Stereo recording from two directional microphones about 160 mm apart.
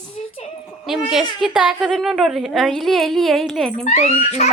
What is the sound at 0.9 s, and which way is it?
A woman's voice, centre (ahead or behind).